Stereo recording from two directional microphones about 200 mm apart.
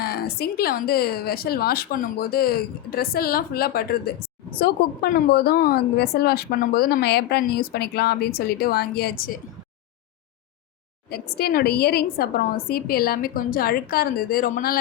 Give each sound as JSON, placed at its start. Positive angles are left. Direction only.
{"t": 0.0, "sound": "a woman's voice", "side_deg": 50}
{"t": 11.1, "sound": "a woman's voice", "side_deg": 50}